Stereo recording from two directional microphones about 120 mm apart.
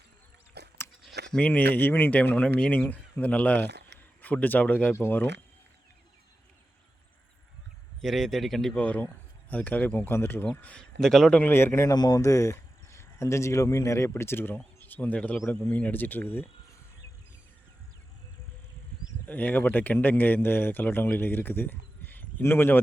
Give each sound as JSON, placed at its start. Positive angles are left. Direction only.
{"t": 1.0, "sound": "speech", "side_deg": 5}
{"t": 8.0, "sound": "speech", "side_deg": 0}
{"t": 11.4, "sound": "a man's voice", "side_deg": 20}
{"t": 19.3, "sound": "speech", "side_deg": 15}